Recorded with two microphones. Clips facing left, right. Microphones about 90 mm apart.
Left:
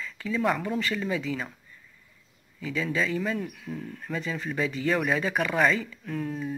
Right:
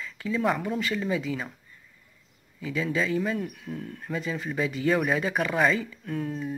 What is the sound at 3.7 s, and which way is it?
Speech, centre (ahead or behind).